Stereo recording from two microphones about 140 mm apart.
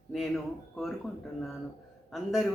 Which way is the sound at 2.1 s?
Centre (ahead or behind).